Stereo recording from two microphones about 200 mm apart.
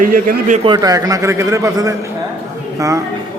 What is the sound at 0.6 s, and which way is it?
A man's voice, 20° right (ahead or behind).